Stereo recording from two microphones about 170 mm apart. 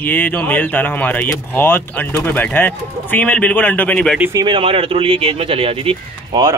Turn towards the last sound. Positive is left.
turn(degrees=-35)  # may be behind; listen again after turning